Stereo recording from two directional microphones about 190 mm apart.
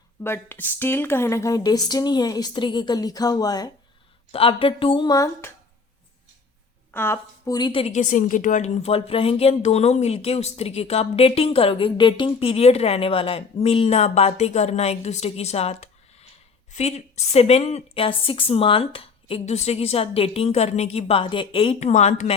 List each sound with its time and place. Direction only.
0.2 s speech: 10° left (ahead or behind)
6.9 s a woman's voice: 10° left (ahead or behind); by 22.4 s 35° left (ahead or behind)